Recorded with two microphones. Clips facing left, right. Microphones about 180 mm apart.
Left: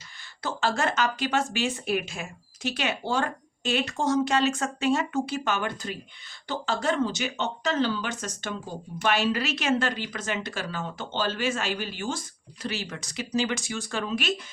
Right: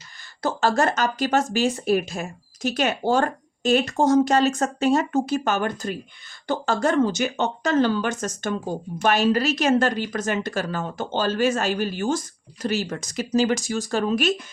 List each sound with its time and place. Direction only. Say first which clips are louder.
0.4 s speech: right 6 dB; 40° right (ahead or behind)